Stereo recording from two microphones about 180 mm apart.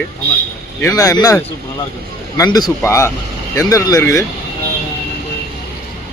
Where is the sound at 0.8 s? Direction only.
20° left (ahead or behind).